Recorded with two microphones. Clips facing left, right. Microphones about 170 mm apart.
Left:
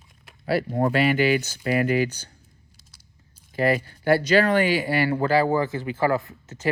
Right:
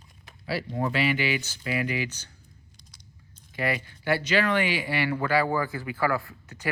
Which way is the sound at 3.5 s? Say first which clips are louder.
Left 7 dB; 40° left (ahead or behind).